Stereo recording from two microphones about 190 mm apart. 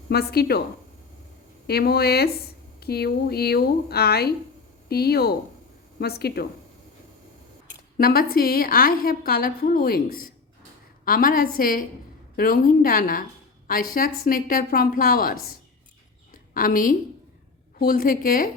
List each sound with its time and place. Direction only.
0.1 s a woman's voice: 55° left (ahead or behind)
1.6 s a woman's voice: 55° left (ahead or behind)
7.9 s a woman's voice: 50° left (ahead or behind)
16.3 s a sound: 45° left (ahead or behind)
17.7 s a woman's voice: 50° left (ahead or behind)